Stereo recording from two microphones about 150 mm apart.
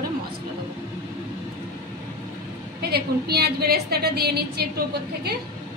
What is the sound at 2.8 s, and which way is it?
A woman's voice, 90° right.